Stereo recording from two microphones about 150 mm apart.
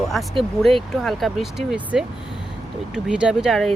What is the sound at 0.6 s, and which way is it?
Speech, centre (ahead or behind).